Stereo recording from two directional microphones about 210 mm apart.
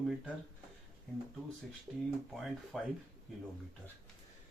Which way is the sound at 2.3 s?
Centre (ahead or behind).